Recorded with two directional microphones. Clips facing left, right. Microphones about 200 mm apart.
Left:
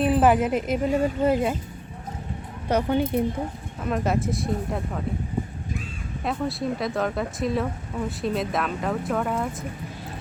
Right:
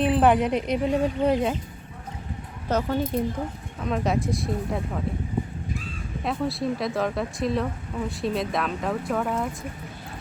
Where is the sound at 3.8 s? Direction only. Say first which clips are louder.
Even; 5° left (ahead or behind).